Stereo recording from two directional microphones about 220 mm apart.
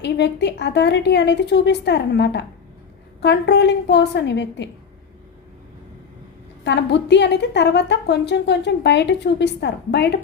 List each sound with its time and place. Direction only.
0.0 s a woman's voice: 50° left (ahead or behind)
6.7 s a woman's voice: 50° left (ahead or behind)